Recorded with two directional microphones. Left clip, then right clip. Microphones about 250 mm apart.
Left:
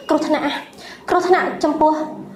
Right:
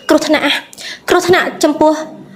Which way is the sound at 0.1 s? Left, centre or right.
Right.